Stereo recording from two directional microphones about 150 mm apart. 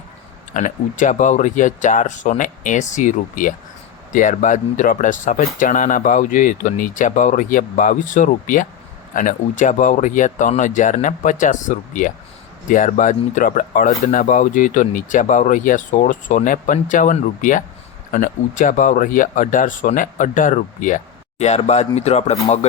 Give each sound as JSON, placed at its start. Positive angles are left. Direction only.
{"t": 0.5, "sound": "speech", "side_deg": 55}